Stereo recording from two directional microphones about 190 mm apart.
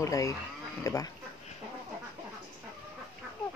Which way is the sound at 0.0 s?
15° left (ahead or behind).